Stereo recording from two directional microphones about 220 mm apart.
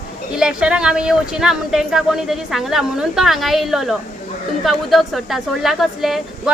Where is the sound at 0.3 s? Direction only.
5° right (ahead or behind).